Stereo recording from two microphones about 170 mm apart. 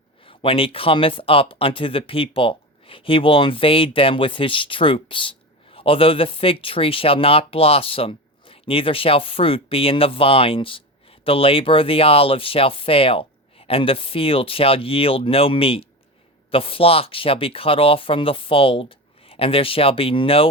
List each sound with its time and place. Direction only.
0.3 s speech: 30° left (ahead or behind)